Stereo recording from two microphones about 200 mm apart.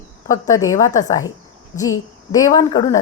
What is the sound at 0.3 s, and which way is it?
A woman's voice, 15° left (ahead or behind).